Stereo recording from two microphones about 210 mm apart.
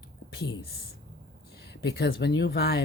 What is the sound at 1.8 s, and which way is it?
Speech, 50° left (ahead or behind).